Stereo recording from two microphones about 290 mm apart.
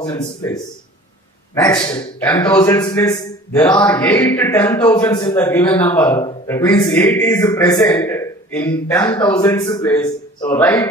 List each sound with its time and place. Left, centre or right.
0.0 s a man's voice: centre